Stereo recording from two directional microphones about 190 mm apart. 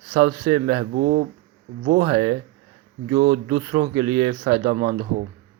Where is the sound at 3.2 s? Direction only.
55° right (ahead or behind).